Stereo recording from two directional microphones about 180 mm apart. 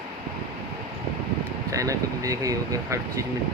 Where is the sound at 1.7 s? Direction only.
20° right (ahead or behind).